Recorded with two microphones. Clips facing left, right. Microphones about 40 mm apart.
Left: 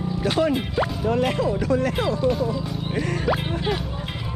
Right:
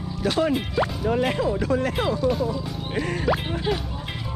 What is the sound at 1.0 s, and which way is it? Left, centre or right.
Speech, centre.